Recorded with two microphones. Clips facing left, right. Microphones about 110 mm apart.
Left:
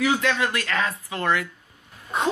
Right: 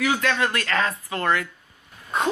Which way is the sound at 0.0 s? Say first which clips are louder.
Left 1 dB; 20° left (ahead or behind).